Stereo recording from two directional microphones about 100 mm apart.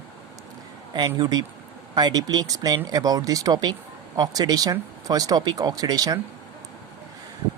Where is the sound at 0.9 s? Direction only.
45° right (ahead or behind).